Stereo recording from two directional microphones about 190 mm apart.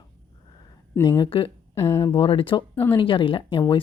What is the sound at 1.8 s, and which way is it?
Speech, 15° left (ahead or behind).